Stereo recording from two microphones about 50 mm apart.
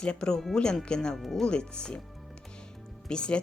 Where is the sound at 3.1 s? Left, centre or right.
Centre.